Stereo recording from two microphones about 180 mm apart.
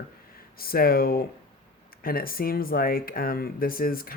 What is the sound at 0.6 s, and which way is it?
Speech, 55° left (ahead or behind).